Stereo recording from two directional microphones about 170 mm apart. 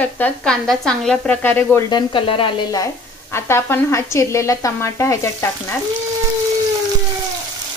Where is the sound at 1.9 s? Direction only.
30° left (ahead or behind).